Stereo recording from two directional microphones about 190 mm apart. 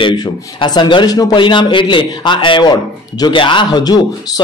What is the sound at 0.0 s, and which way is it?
A man's voice, 25° left (ahead or behind).